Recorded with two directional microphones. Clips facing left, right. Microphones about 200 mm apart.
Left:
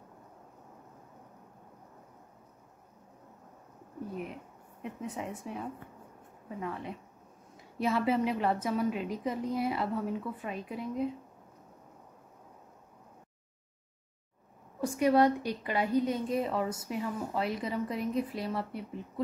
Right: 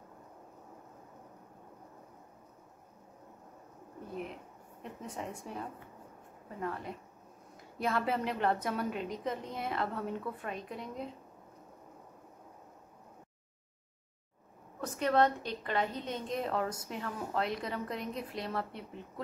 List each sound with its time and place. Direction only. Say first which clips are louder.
5.0 s a woman's voice: left 3 dB; 5° left (ahead or behind)
14.8 s a woman's voice: left 4 dB; 10° left (ahead or behind)